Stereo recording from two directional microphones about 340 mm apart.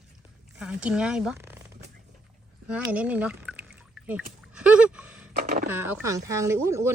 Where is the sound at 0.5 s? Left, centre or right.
Centre.